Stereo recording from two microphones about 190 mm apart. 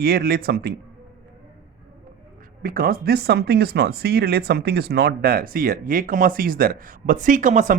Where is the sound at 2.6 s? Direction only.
50° right (ahead or behind).